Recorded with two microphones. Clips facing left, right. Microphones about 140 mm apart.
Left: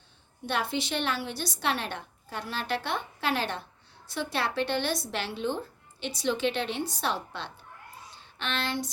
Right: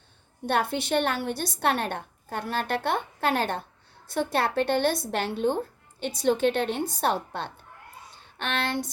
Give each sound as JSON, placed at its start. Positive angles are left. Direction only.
{"t": 0.4, "sound": "a woman's voice", "side_deg": -55}